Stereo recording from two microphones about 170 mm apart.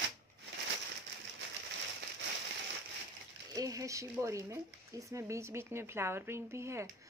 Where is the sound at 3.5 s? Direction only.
20° right (ahead or behind).